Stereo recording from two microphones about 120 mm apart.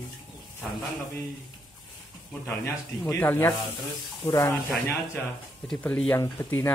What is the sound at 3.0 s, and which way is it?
Speech, 20° left (ahead or behind).